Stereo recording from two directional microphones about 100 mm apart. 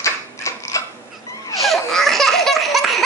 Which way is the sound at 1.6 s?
Centre (ahead or behind).